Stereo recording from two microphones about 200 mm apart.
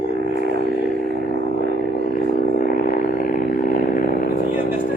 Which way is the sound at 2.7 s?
45° left (ahead or behind).